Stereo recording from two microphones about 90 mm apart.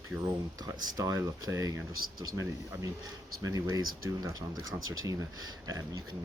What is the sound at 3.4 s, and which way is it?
Speech, 40° right (ahead or behind).